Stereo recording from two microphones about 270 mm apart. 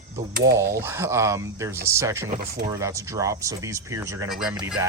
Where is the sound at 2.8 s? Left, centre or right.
Centre.